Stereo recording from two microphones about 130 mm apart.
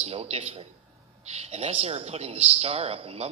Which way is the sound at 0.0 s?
55° right (ahead or behind).